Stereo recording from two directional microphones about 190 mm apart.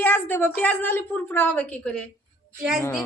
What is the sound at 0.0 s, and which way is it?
Speech, 10° left (ahead or behind).